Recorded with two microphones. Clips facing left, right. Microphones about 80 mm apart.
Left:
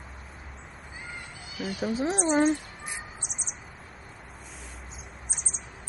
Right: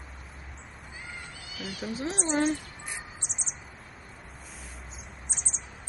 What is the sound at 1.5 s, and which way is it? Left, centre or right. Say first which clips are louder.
Speech: left 6 dB; centre.